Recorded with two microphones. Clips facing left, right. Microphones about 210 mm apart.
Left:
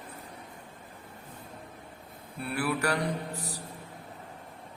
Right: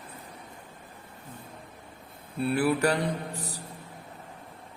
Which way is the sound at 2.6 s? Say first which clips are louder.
Right 4 dB; 25° right (ahead or behind).